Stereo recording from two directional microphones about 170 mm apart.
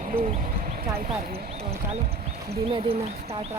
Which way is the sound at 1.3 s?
35° right (ahead or behind).